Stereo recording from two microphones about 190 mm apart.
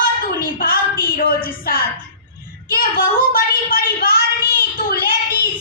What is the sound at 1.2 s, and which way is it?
A woman's voice, 50° left (ahead or behind).